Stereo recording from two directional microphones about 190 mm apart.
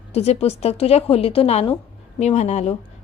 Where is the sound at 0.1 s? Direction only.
35° left (ahead or behind).